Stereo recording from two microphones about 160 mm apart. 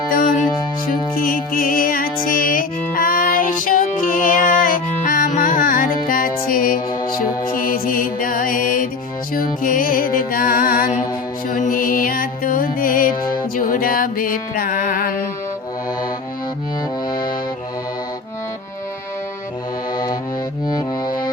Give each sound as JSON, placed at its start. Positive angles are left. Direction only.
{"t": 0.1, "sound": "music", "side_deg": 60}
{"t": 17.1, "sound": "accordion", "side_deg": 30}
{"t": 20.7, "sound": "music", "side_deg": 25}